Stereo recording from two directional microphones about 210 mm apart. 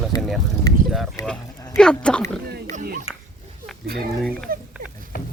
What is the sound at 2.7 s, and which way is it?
Speech, 45° right (ahead or behind).